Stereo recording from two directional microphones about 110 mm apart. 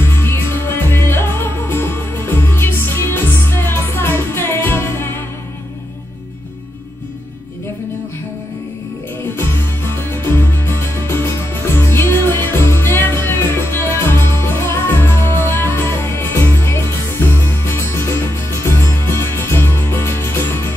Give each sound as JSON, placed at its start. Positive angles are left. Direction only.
{"t": 0.0, "sound": "music", "side_deg": 20}
{"t": 9.3, "sound": "music", "side_deg": 20}